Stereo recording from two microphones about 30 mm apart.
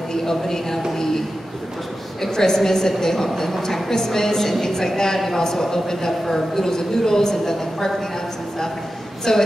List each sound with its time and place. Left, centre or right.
0.1 s a man's voice: centre
2.3 s a woman's voice: centre
3.6 s a woman's voice: centre
9.3 s a sound: centre